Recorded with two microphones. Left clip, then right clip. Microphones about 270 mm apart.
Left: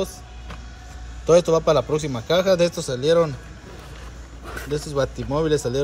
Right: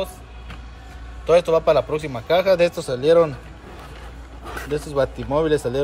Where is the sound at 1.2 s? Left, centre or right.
Centre.